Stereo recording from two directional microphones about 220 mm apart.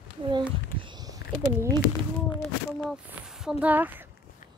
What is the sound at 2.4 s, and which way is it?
Speech, centre (ahead or behind).